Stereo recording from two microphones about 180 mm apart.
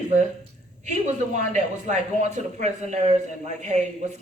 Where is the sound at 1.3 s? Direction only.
40° right (ahead or behind).